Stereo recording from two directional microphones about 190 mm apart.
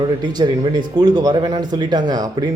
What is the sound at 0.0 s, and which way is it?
Speech, 20° right (ahead or behind).